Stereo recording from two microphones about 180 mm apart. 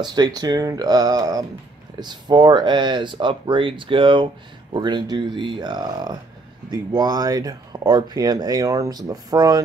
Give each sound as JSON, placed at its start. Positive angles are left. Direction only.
{"t": 0.0, "sound": "speech", "side_deg": -20}